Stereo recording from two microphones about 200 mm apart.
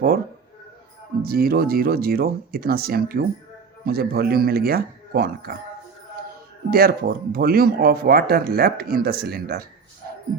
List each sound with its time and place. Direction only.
1.2 s speech: 50° right (ahead or behind)
6.7 s speech: 50° right (ahead or behind)